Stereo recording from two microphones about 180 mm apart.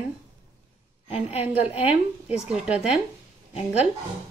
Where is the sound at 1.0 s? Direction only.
35° left (ahead or behind).